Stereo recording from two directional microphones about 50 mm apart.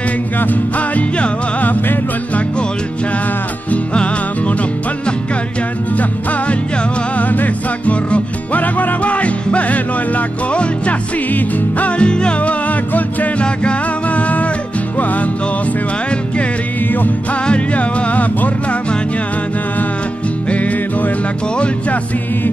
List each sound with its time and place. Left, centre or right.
0.4 s music: left
3.7 s music: left
7.2 s music: left
12.0 s music: centre
16.9 s music: left
17.5 s music: left
20.4 s music: left